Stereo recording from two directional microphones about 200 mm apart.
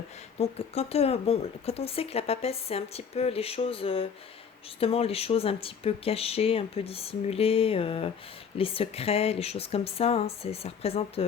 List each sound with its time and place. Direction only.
0.3 s speech: 30° left (ahead or behind)